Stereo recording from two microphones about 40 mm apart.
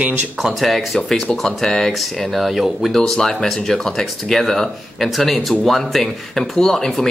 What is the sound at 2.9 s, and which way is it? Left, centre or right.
Speech, centre.